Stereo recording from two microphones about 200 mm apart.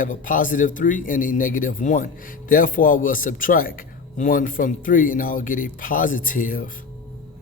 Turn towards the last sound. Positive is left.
turn(degrees=45)  # may be behind; listen again after turning